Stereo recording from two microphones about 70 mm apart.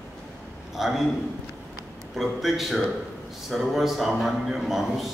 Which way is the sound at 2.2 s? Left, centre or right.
Centre.